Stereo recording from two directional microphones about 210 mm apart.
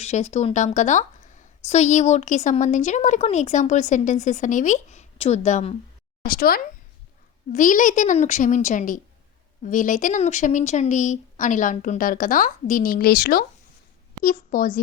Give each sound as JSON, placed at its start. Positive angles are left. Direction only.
{"t": 0.0, "sound": "a woman's voice", "side_deg": 30}
{"t": 6.2, "sound": "a woman's voice", "side_deg": 45}